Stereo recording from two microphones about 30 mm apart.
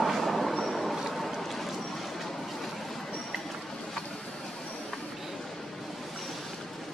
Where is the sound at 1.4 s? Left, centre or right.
Centre.